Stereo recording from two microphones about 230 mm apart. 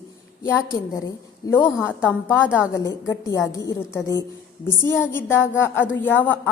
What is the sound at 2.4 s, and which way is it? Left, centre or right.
Speech, centre.